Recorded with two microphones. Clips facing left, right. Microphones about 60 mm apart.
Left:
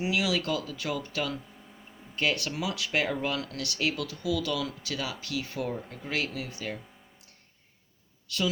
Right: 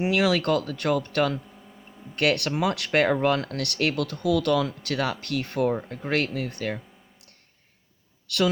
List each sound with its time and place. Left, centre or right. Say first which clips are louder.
0.0 s speech: right 6 dB; right
8.3 s speech: right 7 dB; right